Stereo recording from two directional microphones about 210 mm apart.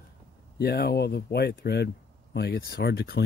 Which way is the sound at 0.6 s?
50° left (ahead or behind).